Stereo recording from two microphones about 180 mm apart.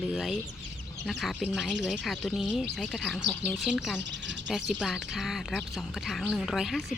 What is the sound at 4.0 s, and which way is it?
Bird, 80° right.